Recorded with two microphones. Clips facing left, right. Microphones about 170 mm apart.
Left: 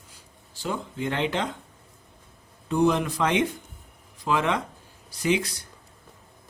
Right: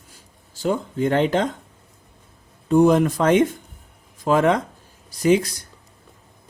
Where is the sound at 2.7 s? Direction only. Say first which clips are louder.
Right 7 dB; 45° right (ahead or behind).